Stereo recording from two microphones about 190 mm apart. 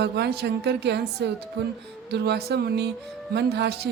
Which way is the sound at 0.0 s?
60° right (ahead or behind).